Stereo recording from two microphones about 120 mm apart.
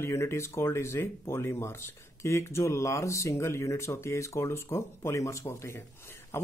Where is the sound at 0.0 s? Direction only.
25° left (ahead or behind).